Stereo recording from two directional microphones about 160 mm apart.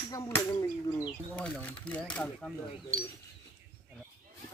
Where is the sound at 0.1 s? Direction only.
25° left (ahead or behind).